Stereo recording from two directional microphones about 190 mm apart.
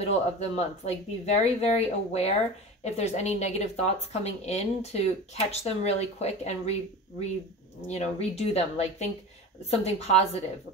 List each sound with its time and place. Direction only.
0.0 s speech: 35° left (ahead or behind)
7.9 s speech: 35° left (ahead or behind)